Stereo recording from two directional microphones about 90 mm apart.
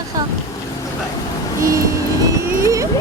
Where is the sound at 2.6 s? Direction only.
35° right (ahead or behind).